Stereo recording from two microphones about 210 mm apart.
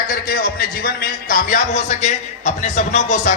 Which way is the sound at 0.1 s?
45° left (ahead or behind).